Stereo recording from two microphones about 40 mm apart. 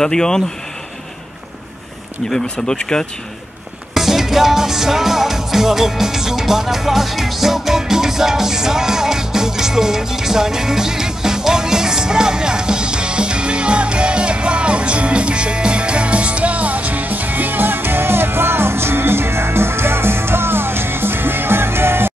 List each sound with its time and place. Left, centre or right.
0.0 s speech: centre
2.4 s speech: left
3.9 s music: centre; by 22.1 s right